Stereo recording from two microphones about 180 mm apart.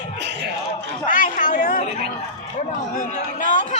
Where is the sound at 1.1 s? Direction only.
45° left (ahead or behind).